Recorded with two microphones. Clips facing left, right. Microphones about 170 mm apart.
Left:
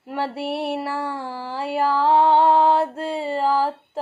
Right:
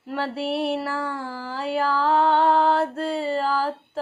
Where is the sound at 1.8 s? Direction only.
15° left (ahead or behind).